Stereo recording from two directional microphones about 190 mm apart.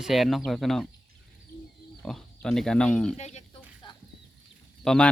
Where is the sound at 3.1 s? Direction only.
35° left (ahead or behind).